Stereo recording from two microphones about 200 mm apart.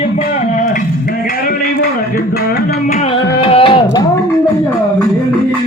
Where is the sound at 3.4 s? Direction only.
25° left (ahead or behind).